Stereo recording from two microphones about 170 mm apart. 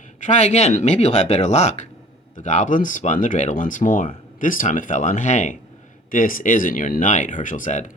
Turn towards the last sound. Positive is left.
turn(degrees=50)  # may be behind; listen again after turning